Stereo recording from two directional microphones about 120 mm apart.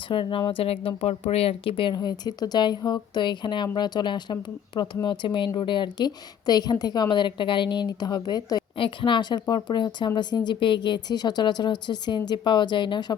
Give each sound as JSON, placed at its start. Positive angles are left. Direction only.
{"t": 0.1, "sound": "a woman's voice", "side_deg": 45}